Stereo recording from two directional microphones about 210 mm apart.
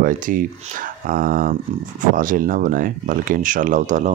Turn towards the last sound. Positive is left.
turn(degrees=-35)  # may be behind; listen again after turning